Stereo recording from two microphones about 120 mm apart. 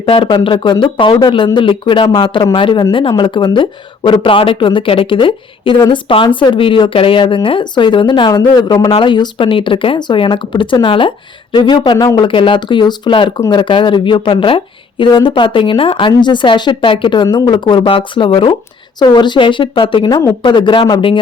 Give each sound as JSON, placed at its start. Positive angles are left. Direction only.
{"t": 0.0, "sound": "speech", "side_deg": 45}